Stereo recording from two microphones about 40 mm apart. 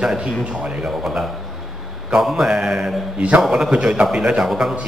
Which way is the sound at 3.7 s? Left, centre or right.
Right.